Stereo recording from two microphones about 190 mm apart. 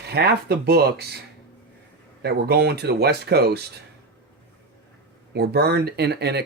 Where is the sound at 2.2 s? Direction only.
60° right (ahead or behind).